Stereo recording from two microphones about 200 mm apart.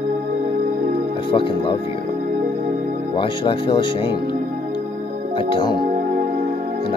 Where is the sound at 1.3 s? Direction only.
25° left (ahead or behind).